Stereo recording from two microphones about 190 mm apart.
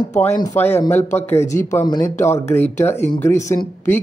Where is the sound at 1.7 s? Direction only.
15° left (ahead or behind).